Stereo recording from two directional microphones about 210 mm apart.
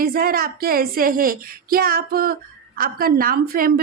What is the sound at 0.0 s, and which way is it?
A woman's voice, 45° right (ahead or behind).